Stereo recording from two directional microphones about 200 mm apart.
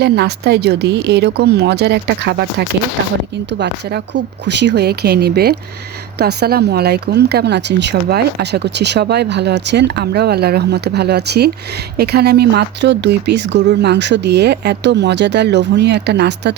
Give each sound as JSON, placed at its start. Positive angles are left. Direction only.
{"t": 0.0, "sound": "speech", "side_deg": -55}